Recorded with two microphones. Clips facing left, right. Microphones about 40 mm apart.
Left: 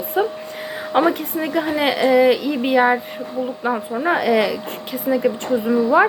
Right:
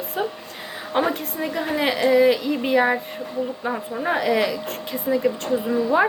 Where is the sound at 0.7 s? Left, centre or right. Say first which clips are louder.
Left 4 dB; left.